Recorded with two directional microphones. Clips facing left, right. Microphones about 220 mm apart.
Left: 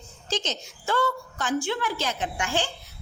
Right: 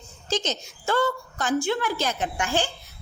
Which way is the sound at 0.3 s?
45° right (ahead or behind).